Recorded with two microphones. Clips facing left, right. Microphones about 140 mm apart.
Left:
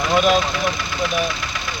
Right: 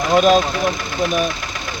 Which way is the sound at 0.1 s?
45° right (ahead or behind).